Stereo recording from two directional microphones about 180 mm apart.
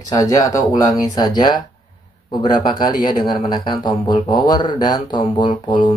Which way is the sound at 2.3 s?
25° left (ahead or behind).